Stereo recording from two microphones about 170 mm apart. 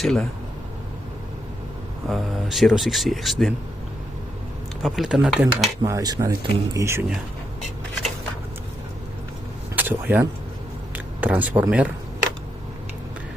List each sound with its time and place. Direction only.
0.0 s speech: centre (ahead or behind)
2.0 s speech: centre (ahead or behind)
4.8 s speech: centre (ahead or behind)
5.8 s speech: 20° right (ahead or behind)
9.7 s speech: 10° right (ahead or behind)